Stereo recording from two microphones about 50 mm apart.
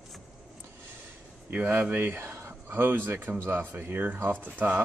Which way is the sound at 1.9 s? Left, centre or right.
Right.